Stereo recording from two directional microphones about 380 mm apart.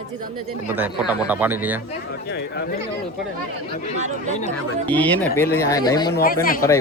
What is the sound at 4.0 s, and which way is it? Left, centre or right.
Speech, centre.